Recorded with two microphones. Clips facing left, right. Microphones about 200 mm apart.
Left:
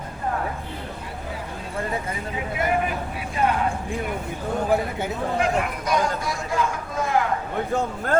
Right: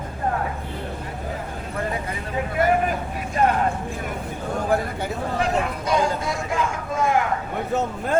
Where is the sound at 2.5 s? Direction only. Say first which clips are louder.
Right 3 dB; 45° right (ahead or behind).